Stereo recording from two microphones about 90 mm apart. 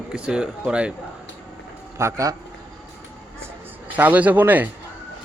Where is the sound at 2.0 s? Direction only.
35° right (ahead or behind).